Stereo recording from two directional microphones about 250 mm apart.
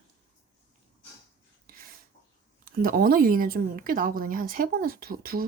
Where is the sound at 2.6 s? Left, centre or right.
Right.